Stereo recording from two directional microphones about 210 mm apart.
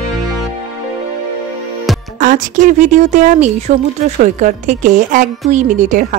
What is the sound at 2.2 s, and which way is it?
A woman's voice, 40° right (ahead or behind).